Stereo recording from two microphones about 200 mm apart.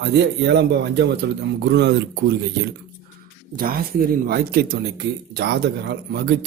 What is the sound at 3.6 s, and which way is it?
Speech, 45° right (ahead or behind).